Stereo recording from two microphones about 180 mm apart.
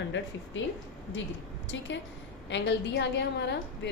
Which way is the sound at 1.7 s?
90° left.